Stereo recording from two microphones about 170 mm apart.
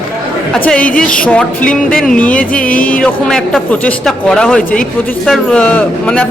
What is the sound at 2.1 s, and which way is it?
Speech, 10° left (ahead or behind).